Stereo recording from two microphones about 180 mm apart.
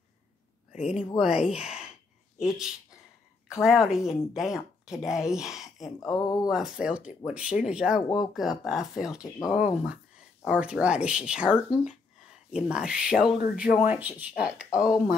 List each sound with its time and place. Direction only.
0.7 s speech: 5° right (ahead or behind)
3.6 s speech: 5° right (ahead or behind)
5.9 s a sound: 20° left (ahead or behind)
6.5 s speech: 5° right (ahead or behind)